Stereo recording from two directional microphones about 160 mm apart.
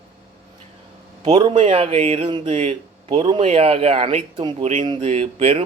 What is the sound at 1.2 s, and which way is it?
Speech, 30° right (ahead or behind).